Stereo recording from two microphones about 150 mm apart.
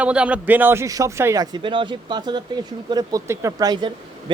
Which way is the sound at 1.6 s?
35° right (ahead or behind).